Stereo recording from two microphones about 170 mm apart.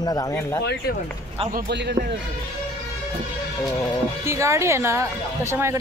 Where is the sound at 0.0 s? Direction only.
20° left (ahead or behind).